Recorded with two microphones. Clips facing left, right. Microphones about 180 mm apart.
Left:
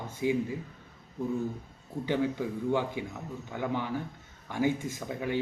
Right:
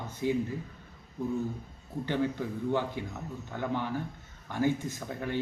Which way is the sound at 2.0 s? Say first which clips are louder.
Left 1 dB; 10° left (ahead or behind).